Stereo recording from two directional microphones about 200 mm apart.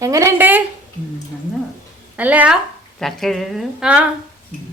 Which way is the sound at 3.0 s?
Centre (ahead or behind).